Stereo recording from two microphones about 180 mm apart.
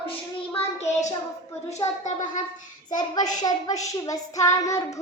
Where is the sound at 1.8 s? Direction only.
15° left (ahead or behind).